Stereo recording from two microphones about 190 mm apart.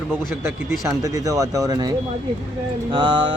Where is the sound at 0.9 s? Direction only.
15° right (ahead or behind).